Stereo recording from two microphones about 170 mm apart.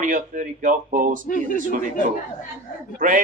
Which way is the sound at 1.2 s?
55° left (ahead or behind).